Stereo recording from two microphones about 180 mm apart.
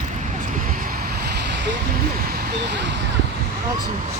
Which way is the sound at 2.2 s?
65° right (ahead or behind).